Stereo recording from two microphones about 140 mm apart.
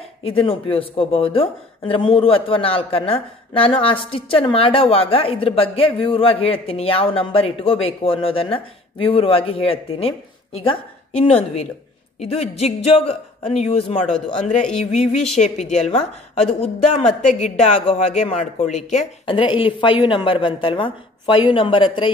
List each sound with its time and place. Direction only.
0.2 s a woman's voice: 40° left (ahead or behind)
14.0 s a man's voice: 5° left (ahead or behind)
15.3 s a woman's voice: 50° left (ahead or behind)
19.2 s speech: 35° left (ahead or behind)